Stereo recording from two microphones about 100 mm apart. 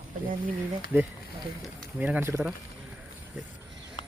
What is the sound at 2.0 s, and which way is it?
Speech, 20° right (ahead or behind).